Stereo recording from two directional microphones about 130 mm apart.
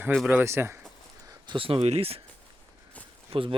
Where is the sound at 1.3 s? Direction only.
40° right (ahead or behind).